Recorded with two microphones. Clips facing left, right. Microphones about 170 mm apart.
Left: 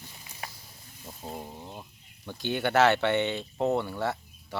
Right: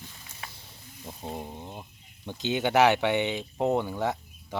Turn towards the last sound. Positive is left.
turn(degrees=-15)  # may be behind; listen again after turning